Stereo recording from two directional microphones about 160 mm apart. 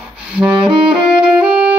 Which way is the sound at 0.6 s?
5° right (ahead or behind).